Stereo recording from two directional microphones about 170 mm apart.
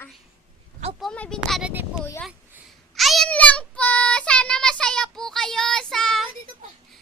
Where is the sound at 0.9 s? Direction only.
5° left (ahead or behind).